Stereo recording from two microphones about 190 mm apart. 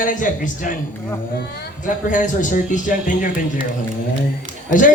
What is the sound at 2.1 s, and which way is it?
Speech, 45° left (ahead or behind).